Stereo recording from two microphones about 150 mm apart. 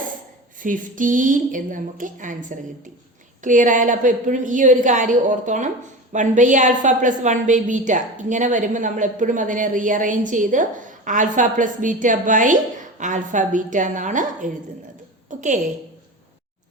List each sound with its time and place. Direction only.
0.6 s a woman's voice: 60° right (ahead or behind)